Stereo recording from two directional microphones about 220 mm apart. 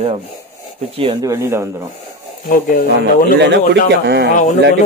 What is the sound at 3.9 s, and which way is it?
Rub, 50° right (ahead or behind).